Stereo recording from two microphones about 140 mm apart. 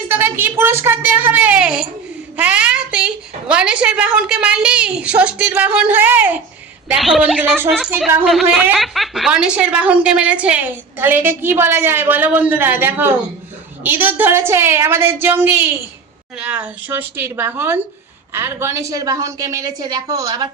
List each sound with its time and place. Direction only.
0.1 s speech: 15° right (ahead or behind)
6.8 s speech: centre (ahead or behind)
8.2 s a woman's voice: centre (ahead or behind); by 20.5 s 25° right (ahead or behind)